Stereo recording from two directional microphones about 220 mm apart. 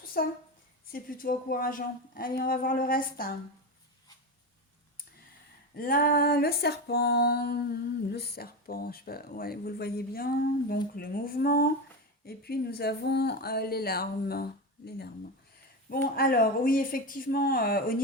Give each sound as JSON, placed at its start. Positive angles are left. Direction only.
{"t": 0.0, "sound": "a sound", "side_deg": 40}
{"t": 0.9, "sound": "a woman's voice", "side_deg": 40}
{"t": 5.7, "sound": "female singing", "side_deg": 40}
{"t": 16.1, "sound": "a woman's voice", "side_deg": 40}